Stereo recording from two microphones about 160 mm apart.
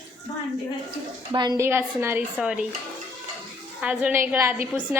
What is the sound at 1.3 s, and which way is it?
A woman's voice, 25° right (ahead or behind).